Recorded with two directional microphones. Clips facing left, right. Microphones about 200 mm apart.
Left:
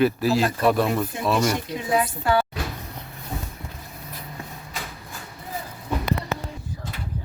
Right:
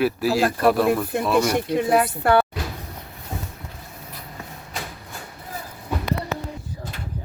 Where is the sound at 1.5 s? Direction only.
60° right (ahead or behind).